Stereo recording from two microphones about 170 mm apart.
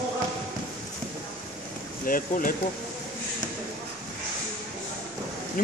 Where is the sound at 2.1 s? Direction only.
55° left (ahead or behind).